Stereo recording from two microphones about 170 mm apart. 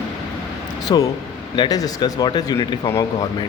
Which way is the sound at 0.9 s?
20° left (ahead or behind).